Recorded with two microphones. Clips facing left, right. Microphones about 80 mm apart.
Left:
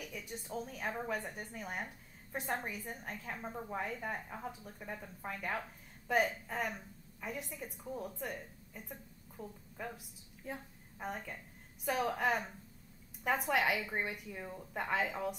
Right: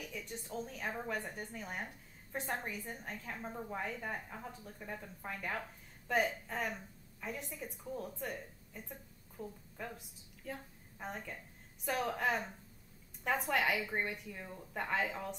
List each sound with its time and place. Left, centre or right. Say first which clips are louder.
0.1 s a woman's voice: left 1 dB; centre
6.0 s a woman's voice: left 1 dB; centre